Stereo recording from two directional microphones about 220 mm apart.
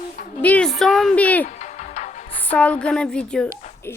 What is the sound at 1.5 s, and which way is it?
Music, 30° left (ahead or behind).